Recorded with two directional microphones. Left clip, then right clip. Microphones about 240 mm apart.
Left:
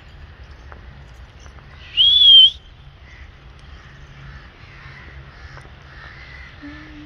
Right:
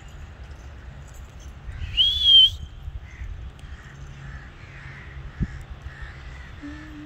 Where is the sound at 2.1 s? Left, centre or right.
Right.